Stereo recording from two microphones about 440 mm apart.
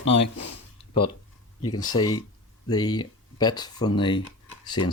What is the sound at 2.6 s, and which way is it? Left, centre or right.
Speech, centre.